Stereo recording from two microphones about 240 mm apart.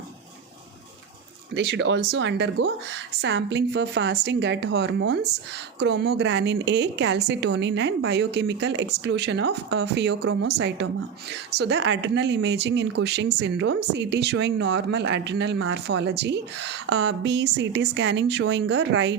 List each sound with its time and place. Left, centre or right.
1.5 s speech: right